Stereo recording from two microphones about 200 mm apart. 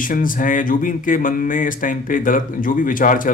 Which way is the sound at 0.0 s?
45° left (ahead or behind).